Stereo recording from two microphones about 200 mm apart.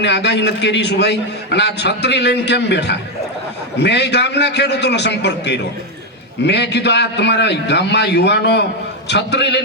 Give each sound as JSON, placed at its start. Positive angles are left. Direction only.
{"t": 0.0, "sound": "a man's voice", "side_deg": 60}